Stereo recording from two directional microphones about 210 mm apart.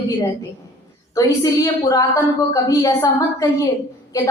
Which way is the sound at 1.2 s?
15° left (ahead or behind).